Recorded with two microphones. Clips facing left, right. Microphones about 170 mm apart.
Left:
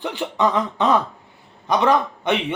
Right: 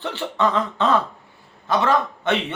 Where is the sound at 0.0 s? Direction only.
15° left (ahead or behind).